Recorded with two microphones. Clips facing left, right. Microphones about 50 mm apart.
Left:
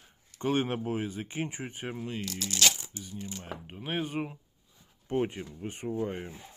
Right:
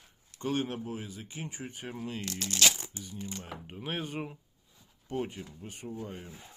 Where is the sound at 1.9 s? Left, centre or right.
Centre.